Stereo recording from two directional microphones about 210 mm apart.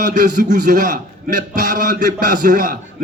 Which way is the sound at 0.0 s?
35° right (ahead or behind).